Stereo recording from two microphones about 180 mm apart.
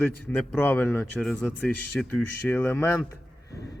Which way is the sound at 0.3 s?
10° left (ahead or behind).